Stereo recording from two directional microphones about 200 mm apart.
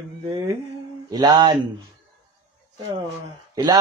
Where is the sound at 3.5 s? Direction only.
20° right (ahead or behind).